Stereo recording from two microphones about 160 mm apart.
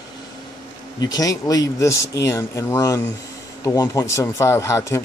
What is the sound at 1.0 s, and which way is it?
Speech, 25° left (ahead or behind).